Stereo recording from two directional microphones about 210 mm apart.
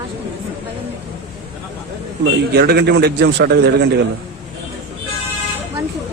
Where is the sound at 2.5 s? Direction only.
50° right (ahead or behind).